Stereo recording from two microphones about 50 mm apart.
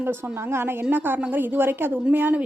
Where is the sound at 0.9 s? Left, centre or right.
Right.